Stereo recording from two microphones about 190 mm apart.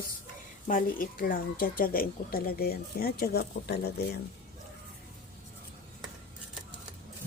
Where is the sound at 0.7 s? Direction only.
45° left (ahead or behind).